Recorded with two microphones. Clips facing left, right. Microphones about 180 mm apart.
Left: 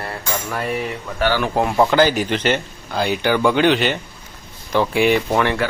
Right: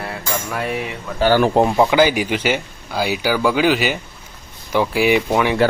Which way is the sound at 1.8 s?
10° right (ahead or behind).